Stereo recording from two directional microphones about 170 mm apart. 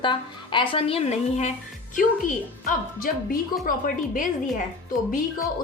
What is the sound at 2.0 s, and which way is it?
A woman's voice, 55° left (ahead or behind).